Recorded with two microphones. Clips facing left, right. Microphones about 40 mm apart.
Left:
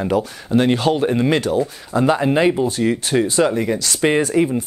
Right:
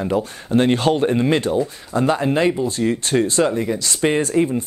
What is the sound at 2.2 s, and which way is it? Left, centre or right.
Speech, centre.